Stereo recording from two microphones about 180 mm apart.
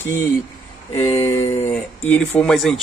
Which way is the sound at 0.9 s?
35° left (ahead or behind).